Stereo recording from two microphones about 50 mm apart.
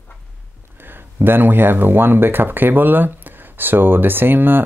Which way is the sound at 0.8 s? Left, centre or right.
Right.